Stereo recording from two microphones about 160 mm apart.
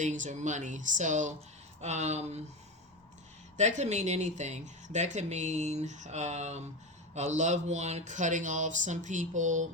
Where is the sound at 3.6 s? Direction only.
45° right (ahead or behind).